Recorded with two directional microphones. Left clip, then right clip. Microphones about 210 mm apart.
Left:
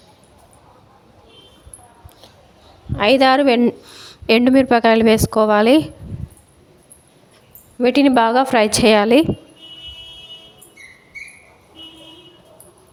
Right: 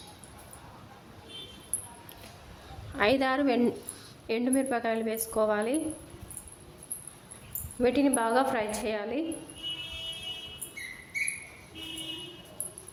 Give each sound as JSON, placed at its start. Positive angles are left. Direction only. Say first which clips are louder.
{"t": 2.9, "sound": "speech", "louder": "left 13 dB", "side_deg": 35}
{"t": 4.3, "sound": "a woman's voice", "louder": "left 16 dB", "side_deg": 50}
{"t": 7.8, "sound": "a woman's voice", "louder": "left 12 dB", "side_deg": 40}